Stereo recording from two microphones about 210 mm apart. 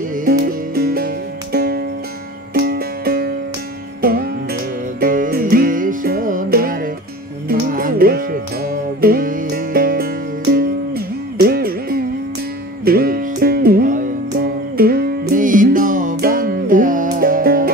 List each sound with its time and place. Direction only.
0.1 s music: 45° right (ahead or behind)